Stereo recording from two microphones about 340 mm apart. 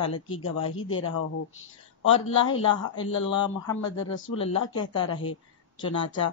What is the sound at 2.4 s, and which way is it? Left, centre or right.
A woman's voice, left.